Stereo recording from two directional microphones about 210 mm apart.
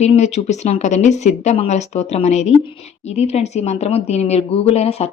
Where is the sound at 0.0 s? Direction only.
30° left (ahead or behind).